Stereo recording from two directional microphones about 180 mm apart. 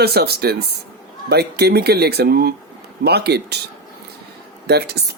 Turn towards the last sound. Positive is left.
turn(degrees=-65)  # may be behind; listen again after turning